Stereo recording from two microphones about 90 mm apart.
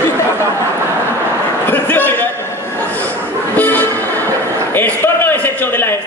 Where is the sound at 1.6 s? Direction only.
20° left (ahead or behind).